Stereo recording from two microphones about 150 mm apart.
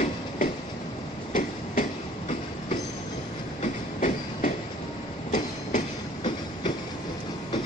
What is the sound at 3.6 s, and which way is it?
Train, 55° left (ahead or behind).